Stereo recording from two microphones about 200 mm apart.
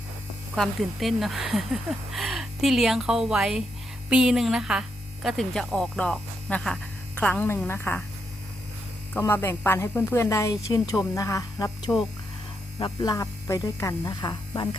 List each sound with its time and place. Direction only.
0.5 s a woman's voice: centre (ahead or behind)
9.1 s a woman's voice: 10° left (ahead or behind)